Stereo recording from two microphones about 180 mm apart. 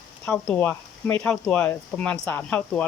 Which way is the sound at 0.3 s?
5° left (ahead or behind).